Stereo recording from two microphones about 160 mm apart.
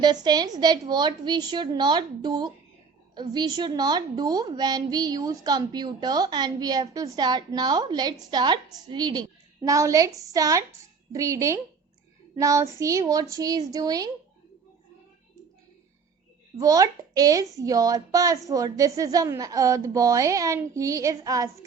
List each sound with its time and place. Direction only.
0.0 s a woman's voice: 25° right (ahead or behind)
16.6 s a woman's voice: 20° right (ahead or behind)